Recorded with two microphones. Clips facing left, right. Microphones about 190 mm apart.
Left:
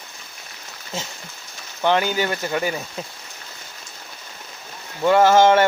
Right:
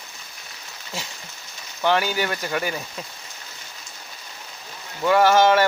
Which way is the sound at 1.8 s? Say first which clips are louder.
Left 2 dB; 20° left (ahead or behind).